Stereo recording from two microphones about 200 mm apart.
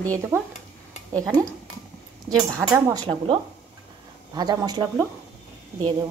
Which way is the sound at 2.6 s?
15° right (ahead or behind).